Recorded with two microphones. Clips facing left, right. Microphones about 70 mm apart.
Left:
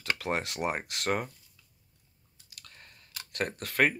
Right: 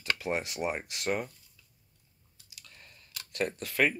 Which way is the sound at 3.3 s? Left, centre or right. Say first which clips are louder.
Left 1 dB; left.